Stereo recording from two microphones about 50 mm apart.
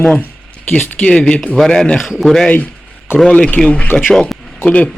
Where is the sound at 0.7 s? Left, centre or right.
Left.